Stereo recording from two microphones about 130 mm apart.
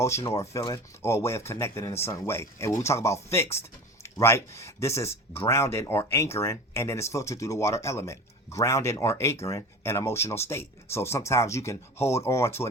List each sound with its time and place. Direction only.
0.0 s speech: 20° left (ahead or behind)